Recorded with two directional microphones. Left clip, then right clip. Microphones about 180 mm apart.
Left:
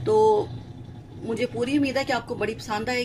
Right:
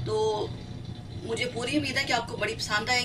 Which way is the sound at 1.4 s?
55° left (ahead or behind).